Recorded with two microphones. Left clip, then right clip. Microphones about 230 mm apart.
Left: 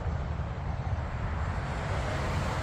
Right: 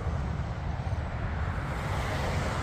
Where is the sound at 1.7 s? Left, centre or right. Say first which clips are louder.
Right 1 dB; centre.